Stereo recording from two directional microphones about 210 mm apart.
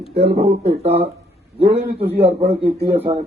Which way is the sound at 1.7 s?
50° right (ahead or behind).